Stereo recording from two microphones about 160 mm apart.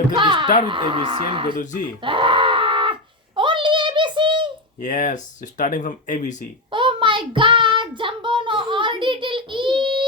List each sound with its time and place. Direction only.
0.2 s a sound: 30° right (ahead or behind)
0.7 s speech: 30° right (ahead or behind)
2.0 s wail: 30° right (ahead or behind)
3.3 s child singing: 30° right (ahead or behind)
4.8 s speech: 50° left (ahead or behind)
6.7 s child singing: 30° right (ahead or behind)